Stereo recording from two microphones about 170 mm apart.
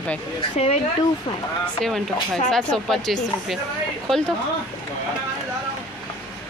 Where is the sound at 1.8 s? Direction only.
Centre (ahead or behind).